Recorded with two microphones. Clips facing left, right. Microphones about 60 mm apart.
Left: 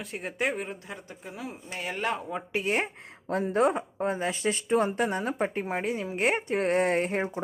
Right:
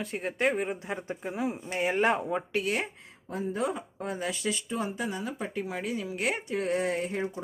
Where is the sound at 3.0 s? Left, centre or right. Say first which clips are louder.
Left 5 dB; left.